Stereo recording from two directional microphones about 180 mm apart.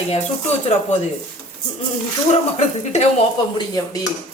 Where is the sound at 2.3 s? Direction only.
40° left (ahead or behind).